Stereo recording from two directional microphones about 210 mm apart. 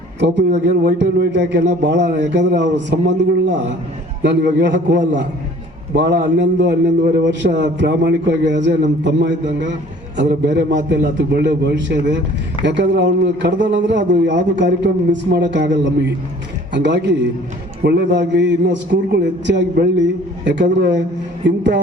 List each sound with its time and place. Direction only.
0.9 s a man's voice: 55° right (ahead or behind)